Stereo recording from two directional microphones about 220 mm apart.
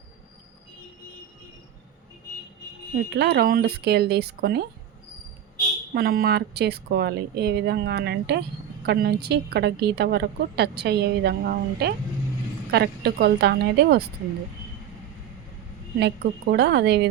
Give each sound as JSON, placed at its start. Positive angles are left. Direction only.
{"t": 3.1, "sound": "a woman's voice", "side_deg": -50}
{"t": 5.9, "sound": "a woman's voice", "side_deg": -45}
{"t": 16.0, "sound": "a woman's voice", "side_deg": -50}